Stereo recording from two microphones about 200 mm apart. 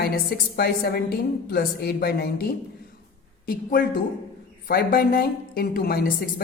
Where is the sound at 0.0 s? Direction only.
50° left (ahead or behind).